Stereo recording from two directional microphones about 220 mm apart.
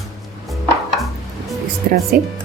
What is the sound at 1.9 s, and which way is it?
Music, 45° right (ahead or behind).